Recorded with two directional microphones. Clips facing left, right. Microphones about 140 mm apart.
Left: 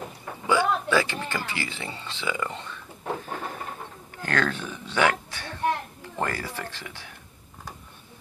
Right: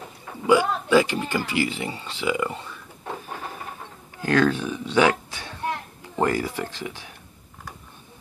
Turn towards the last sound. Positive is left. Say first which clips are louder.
# right 6 dB
turn(degrees=-15)  # may be behind; listen again after turning